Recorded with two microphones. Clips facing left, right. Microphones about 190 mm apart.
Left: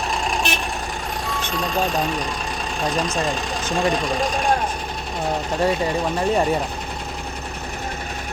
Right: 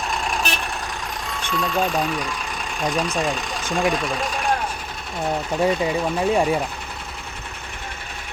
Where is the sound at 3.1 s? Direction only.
10° right (ahead or behind).